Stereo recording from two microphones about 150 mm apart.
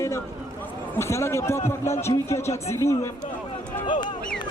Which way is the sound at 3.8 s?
30° left (ahead or behind).